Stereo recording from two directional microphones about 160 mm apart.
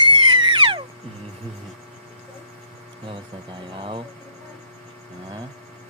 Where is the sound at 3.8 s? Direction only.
35° right (ahead or behind).